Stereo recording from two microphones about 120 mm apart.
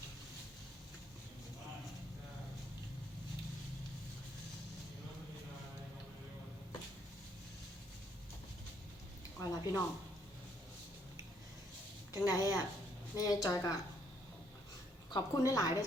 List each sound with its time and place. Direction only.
9.4 s a sound: 30° left (ahead or behind)
12.1 s a woman's voice: 30° left (ahead or behind)
15.1 s a woman's voice: 30° left (ahead or behind)